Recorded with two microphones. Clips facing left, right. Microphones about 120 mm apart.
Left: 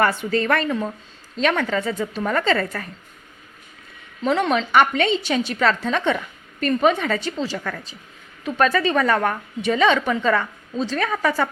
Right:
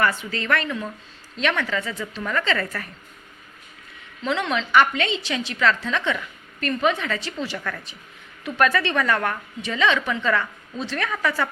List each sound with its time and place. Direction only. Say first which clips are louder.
0.2 s a woman's voice: left 5 dB; 45° left (ahead or behind)
4.2 s a woman's voice: left 5 dB; 45° left (ahead or behind)